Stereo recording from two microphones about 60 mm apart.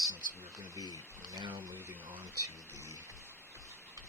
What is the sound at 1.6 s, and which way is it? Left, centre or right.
Speech, right.